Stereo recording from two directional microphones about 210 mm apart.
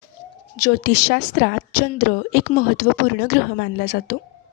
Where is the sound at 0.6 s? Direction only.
50° left (ahead or behind).